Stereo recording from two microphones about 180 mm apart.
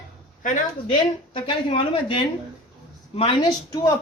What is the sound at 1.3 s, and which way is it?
Speech, 25° left (ahead or behind).